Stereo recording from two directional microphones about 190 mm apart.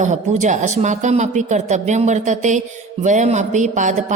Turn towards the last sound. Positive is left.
turn(degrees=-40)  # may be behind; listen again after turning